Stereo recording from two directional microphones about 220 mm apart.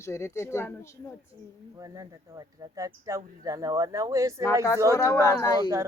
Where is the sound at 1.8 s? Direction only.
15° right (ahead or behind).